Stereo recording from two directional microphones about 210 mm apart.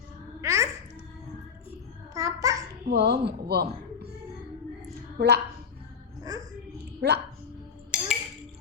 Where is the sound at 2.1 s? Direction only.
15° right (ahead or behind).